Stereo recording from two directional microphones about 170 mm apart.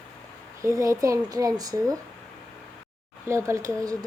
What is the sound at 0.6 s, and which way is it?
A woman's voice, 20° right (ahead or behind).